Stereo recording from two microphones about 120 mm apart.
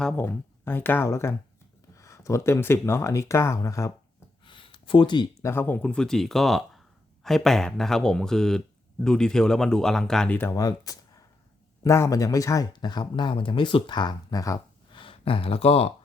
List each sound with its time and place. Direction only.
0.2 s speech: 20° left (ahead or behind)
4.4 s a sound: 45° left (ahead or behind)
5.4 s speech: 20° left (ahead or behind)
10.5 s speech: 30° left (ahead or behind)
14.9 s speech: 45° left (ahead or behind)